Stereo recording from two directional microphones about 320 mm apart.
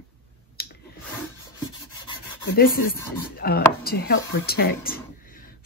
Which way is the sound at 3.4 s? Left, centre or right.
Left.